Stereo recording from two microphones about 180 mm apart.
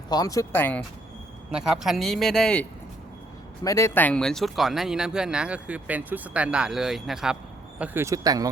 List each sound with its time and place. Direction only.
0.1 s speech: 20° left (ahead or behind)
1.5 s speech: 5° right (ahead or behind)
3.6 s speech: 15° left (ahead or behind); by 7.3 s centre (ahead or behind)
7.8 s speech: 15° right (ahead or behind)